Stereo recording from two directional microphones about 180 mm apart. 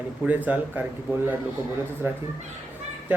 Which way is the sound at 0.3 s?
10° right (ahead or behind).